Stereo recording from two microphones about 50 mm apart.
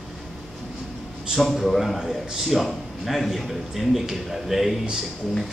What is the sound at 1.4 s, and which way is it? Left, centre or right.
A man's voice, centre.